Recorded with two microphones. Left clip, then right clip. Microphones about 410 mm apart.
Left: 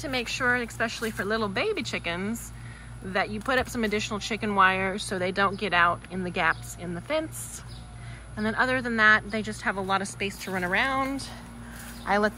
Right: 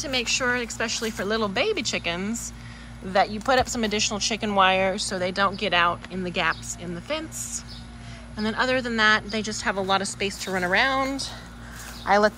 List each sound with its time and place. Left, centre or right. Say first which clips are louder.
0.0 s speech: right 3 dB; centre